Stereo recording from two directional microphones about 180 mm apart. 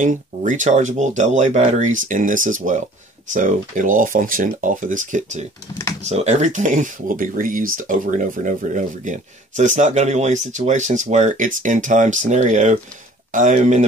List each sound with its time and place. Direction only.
0.0 s speech: 45° right (ahead or behind)